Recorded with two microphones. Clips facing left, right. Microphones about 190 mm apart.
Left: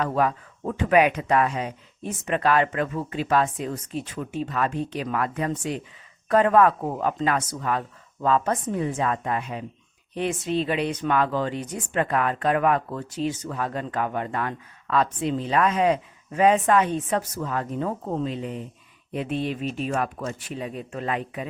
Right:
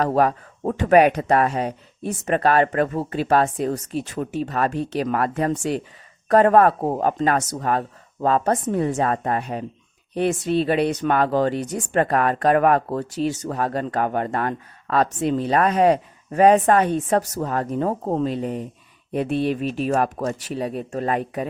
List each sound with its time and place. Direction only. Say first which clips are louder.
0.0 s speech: right 4 dB; 40° right (ahead or behind)
11.6 s speech: right 5 dB; 80° right
11.9 s speech: right 4 dB; 45° right (ahead or behind)
13.1 s speech: right 1 dB; 75° right (ahead or behind)
13.5 s speech: right 5 dB; 40° right (ahead or behind)